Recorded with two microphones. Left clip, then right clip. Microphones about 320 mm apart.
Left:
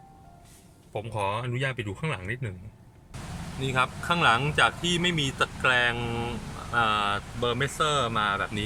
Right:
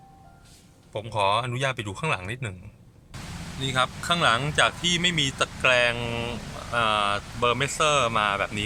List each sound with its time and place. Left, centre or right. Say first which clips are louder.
0.9 s speech: right 6 dB; centre
3.6 s speech: right 1 dB; centre